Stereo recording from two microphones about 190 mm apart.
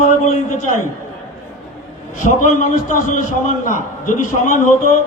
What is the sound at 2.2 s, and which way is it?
A man's voice, 40° left (ahead or behind).